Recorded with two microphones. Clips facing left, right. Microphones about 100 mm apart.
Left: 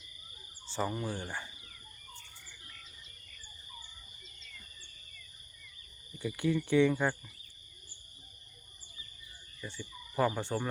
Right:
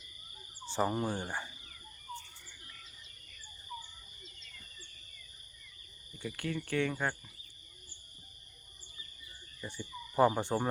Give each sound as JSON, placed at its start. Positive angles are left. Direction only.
{"t": 0.6, "sound": "hoot", "side_deg": -15}
{"t": 0.9, "sound": "speech", "side_deg": -35}
{"t": 1.1, "sound": "speech", "side_deg": -15}
{"t": 6.1, "sound": "speech", "side_deg": 5}
{"t": 6.9, "sound": "speech", "side_deg": 5}
{"t": 9.6, "sound": "owl", "side_deg": -15}